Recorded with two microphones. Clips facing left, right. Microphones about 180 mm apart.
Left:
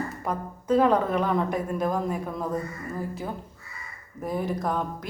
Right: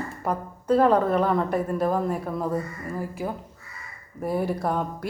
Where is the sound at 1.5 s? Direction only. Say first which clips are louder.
Right 3 dB; 5° right (ahead or behind).